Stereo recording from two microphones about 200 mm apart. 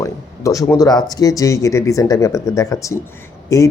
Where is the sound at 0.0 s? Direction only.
15° left (ahead or behind).